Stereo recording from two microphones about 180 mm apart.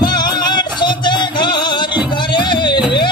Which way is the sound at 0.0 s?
25° left (ahead or behind).